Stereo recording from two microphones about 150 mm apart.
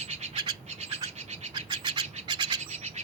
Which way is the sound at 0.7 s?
50° right (ahead or behind).